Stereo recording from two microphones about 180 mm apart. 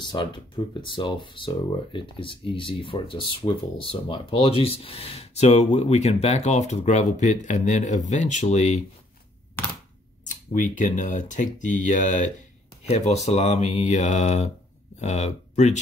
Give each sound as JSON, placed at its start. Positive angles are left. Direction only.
{"t": 0.0, "sound": "speech", "side_deg": 25}
{"t": 10.2, "sound": "speech", "side_deg": 45}